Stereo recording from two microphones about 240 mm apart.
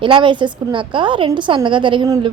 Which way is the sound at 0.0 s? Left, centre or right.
Centre.